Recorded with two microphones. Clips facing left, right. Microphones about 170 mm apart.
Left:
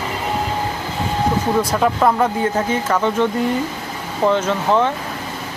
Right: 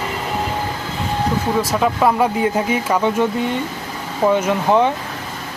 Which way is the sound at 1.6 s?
5° right (ahead or behind).